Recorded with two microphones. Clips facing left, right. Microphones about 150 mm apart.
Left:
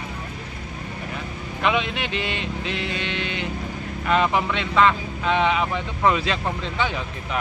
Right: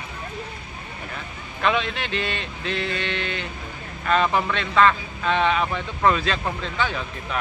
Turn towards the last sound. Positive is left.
turn(degrees=20)  # may be behind; listen again after turning